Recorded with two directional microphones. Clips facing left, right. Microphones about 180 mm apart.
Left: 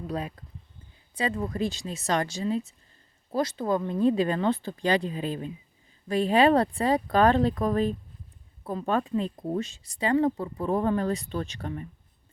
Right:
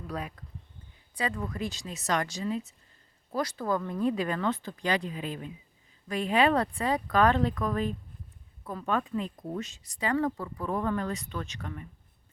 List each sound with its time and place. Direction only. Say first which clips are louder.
0.1 s speech: left 2 dB; 30° left (ahead or behind)